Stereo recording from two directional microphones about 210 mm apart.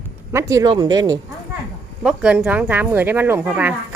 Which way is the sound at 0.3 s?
15° right (ahead or behind).